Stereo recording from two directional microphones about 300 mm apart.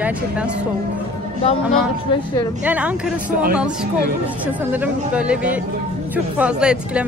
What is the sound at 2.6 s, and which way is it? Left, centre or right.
Speech, centre.